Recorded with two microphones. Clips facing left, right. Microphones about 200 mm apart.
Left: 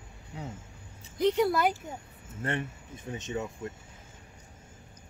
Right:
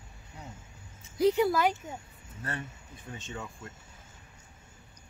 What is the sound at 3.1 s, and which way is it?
Speech, 20° left (ahead or behind).